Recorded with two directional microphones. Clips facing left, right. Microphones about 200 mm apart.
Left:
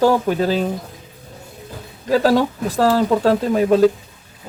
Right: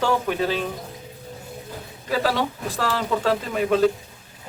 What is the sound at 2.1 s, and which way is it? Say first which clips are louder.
Speech: left 8 dB; 40° left (ahead or behind).